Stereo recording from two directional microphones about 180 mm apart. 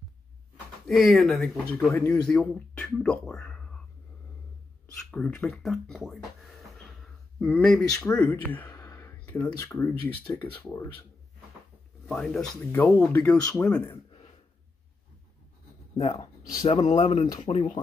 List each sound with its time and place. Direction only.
0.8 s speech: centre (ahead or behind)
4.9 s speech: 5° left (ahead or behind)
7.3 s speech: 5° left (ahead or behind)
12.1 s speech: centre (ahead or behind)
16.0 s speech: 20° left (ahead or behind)
16.6 s speech: 35° left (ahead or behind)